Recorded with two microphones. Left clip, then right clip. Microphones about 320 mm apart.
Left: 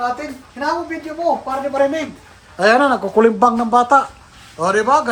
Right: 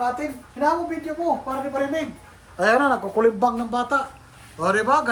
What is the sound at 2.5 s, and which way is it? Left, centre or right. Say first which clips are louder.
Speech: left 5 dB; left.